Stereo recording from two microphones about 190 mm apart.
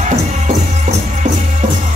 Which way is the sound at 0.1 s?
35° right (ahead or behind).